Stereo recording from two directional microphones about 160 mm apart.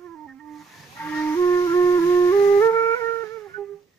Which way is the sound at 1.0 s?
15° left (ahead or behind).